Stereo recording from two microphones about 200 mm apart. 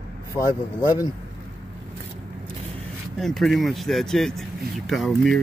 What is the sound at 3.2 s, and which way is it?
Speech, centre (ahead or behind).